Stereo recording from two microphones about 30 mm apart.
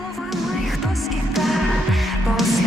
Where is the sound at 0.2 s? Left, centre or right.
Centre.